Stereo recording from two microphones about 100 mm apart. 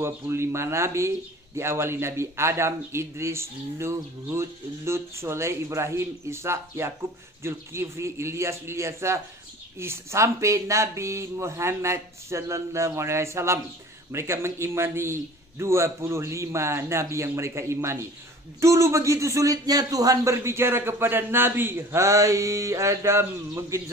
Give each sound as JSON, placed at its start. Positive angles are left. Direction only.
{"t": 0.0, "sound": "a man's voice", "side_deg": -25}